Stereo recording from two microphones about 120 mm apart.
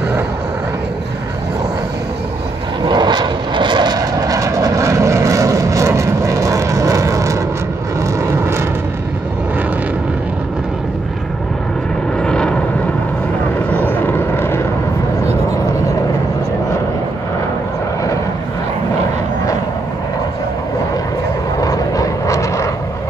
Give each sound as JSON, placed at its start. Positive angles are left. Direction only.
{"t": 2.8, "sound": "vehicle", "side_deg": -40}
{"t": 12.2, "sound": "vehicle", "side_deg": 5}
{"t": 21.5, "sound": "vehicle", "side_deg": 30}